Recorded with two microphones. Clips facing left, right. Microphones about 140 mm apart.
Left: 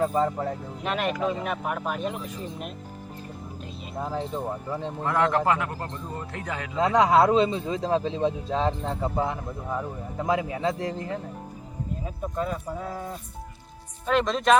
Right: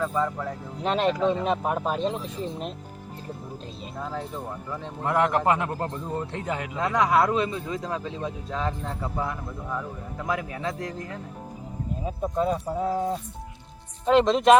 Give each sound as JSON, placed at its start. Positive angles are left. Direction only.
{"t": 0.0, "sound": "speech", "side_deg": 30}
{"t": 0.8, "sound": "speech", "side_deg": -30}
{"t": 4.0, "sound": "a man's voice", "side_deg": 20}
{"t": 5.0, "sound": "speech", "side_deg": -20}
{"t": 6.7, "sound": "a man's voice", "side_deg": 20}
{"t": 12.4, "sound": "speech", "side_deg": -25}